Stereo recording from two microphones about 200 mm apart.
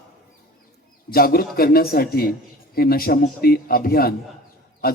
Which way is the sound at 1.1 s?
50° left (ahead or behind).